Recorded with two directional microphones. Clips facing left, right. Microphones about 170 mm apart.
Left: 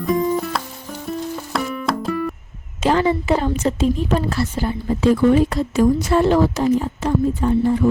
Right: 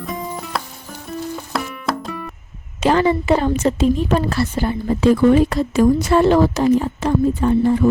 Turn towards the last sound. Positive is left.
turn(degrees=-75)  # may be behind; listen again after turning